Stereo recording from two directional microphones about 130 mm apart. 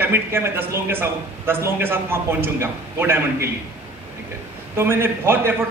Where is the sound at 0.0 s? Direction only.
20° right (ahead or behind).